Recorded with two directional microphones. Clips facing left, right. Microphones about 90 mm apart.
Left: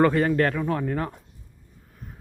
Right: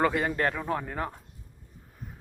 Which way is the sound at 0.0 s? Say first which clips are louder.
Left 6 dB; 10° right (ahead or behind).